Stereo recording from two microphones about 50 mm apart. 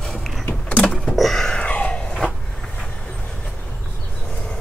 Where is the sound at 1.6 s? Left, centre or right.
Left.